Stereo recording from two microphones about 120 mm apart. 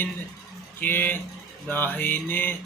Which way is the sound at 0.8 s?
15° left (ahead or behind).